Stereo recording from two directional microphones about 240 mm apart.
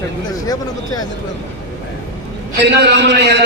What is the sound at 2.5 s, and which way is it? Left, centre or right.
Speech, right.